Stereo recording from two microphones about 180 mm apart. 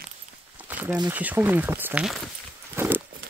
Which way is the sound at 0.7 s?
10° right (ahead or behind).